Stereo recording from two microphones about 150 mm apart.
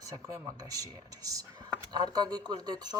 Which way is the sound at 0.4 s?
25° right (ahead or behind).